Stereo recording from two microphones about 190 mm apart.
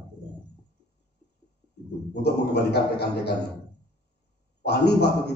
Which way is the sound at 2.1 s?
60° left (ahead or behind).